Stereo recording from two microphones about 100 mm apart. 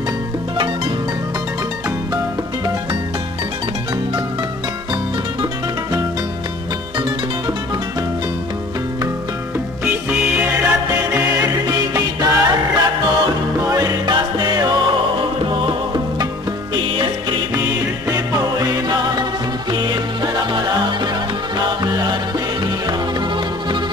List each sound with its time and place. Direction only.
9.8 s music: 10° right (ahead or behind); by 17.6 s 50° right (ahead or behind)
18.1 s music: 35° right (ahead or behind)